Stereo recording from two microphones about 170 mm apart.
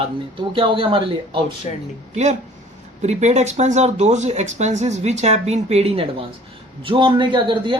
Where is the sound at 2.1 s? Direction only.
40° right (ahead or behind).